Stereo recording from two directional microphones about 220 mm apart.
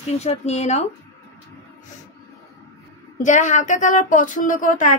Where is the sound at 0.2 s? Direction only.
30° left (ahead or behind).